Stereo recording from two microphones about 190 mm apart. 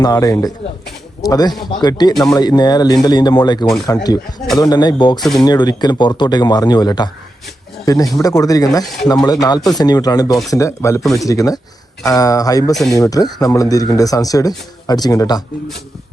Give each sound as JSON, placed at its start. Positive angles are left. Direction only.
{"t": 0.0, "sound": "speech", "side_deg": 20}
{"t": 5.2, "sound": "speech", "side_deg": 0}
{"t": 5.5, "sound": "speech", "side_deg": 20}
{"t": 11.0, "sound": "speech", "side_deg": 0}
{"t": 11.3, "sound": "speech", "side_deg": 20}
{"t": 12.7, "sound": "speech", "side_deg": 0}
{"t": 13.0, "sound": "speech", "side_deg": 20}